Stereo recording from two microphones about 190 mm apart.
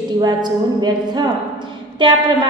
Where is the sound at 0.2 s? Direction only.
20° right (ahead or behind).